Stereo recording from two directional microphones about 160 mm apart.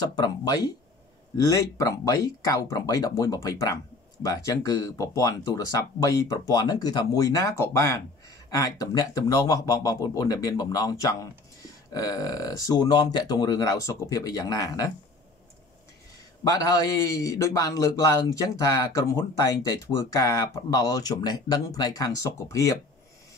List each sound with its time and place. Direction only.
0.0 s speech: 25° left (ahead or behind)
16.4 s speech: 20° left (ahead or behind)